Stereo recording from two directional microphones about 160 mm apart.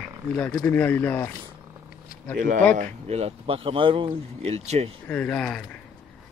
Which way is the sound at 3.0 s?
40° right (ahead or behind).